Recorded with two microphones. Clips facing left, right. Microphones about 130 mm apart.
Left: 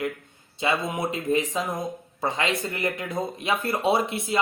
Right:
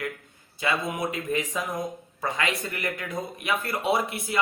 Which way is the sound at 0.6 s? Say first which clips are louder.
Left 2 dB; 25° left (ahead or behind).